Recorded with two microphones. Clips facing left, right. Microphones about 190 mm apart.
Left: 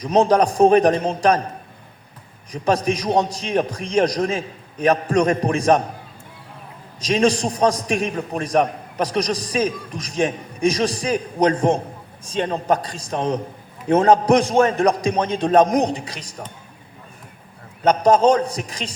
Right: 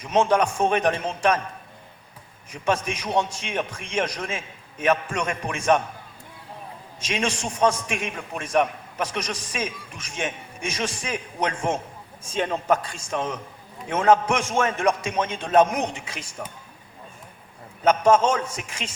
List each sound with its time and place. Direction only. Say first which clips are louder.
0.0 s a man's voice: left 4 dB; 35° left (ahead or behind)
7.0 s a man's voice: left 9 dB; 35° left (ahead or behind)
17.8 s a man's voice: left 4 dB; 35° left (ahead or behind)